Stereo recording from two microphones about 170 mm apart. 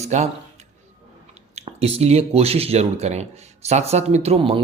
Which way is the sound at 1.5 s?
40° right (ahead or behind).